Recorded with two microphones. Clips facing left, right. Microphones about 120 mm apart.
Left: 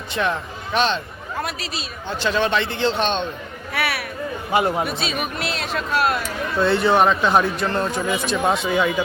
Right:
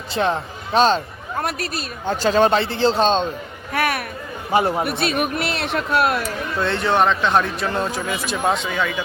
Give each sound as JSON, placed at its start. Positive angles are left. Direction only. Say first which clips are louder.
{"t": 0.1, "sound": "speech", "louder": "right 2 dB", "side_deg": -30}
{"t": 1.5, "sound": "speech", "louder": "right 4 dB", "side_deg": -55}
{"t": 3.8, "sound": "speech", "louder": "right 4 dB", "side_deg": -45}
{"t": 4.9, "sound": "a man's voice", "louder": "right 4 dB", "side_deg": -60}
{"t": 6.6, "sound": "speech", "louder": "left 2 dB", "side_deg": 0}
{"t": 8.7, "sound": "speech", "louder": "left 4 dB", "side_deg": 15}